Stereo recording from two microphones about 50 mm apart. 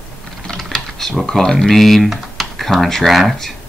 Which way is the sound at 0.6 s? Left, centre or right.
Centre.